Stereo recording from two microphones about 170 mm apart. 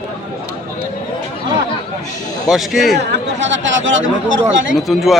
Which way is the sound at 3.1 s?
90° right.